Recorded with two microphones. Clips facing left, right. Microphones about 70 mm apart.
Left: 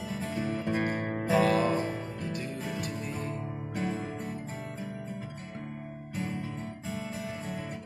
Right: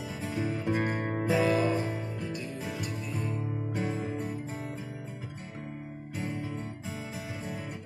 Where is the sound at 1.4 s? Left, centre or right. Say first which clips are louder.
Left 1 dB; left.